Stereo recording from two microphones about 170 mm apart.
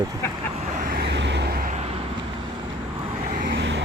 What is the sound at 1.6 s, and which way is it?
Vehicle, 40° right (ahead or behind).